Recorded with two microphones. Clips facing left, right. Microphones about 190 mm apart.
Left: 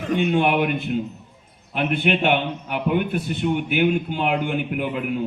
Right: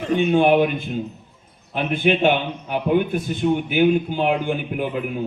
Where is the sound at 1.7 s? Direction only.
65° left (ahead or behind).